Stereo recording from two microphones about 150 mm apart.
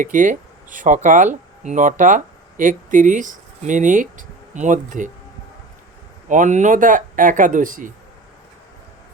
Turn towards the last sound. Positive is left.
turn(degrees=-60)  # may be behind; listen again after turning